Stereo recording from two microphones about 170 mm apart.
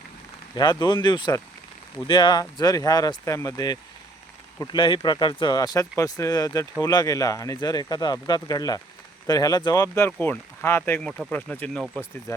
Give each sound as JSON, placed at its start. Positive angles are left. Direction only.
{"t": 0.5, "sound": "speech", "side_deg": 25}